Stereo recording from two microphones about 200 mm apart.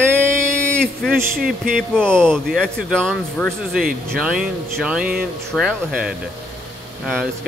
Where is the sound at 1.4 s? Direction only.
45° right (ahead or behind).